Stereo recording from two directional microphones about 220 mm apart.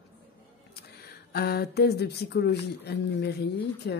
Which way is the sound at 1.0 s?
45° left (ahead or behind).